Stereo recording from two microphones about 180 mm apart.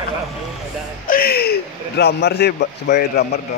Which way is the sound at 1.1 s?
55° left (ahead or behind).